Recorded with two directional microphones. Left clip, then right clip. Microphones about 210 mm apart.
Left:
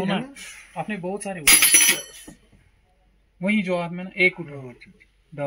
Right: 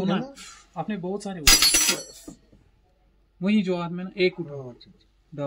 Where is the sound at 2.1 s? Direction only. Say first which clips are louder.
Even; 40° right (ahead or behind).